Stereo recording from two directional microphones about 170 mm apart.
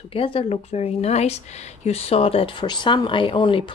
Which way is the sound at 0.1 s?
35° left (ahead or behind).